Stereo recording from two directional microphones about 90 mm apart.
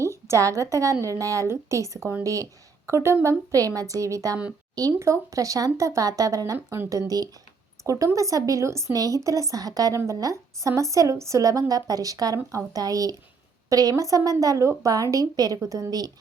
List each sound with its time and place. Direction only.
0.0 s a woman's voice: 35° right (ahead or behind)
4.9 s speech: 30° right (ahead or behind)